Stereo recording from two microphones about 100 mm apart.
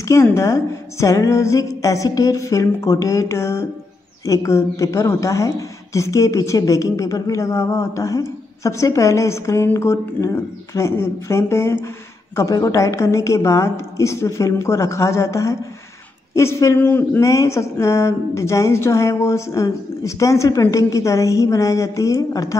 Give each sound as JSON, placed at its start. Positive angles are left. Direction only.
{"t": 0.0, "sound": "speech", "side_deg": 30}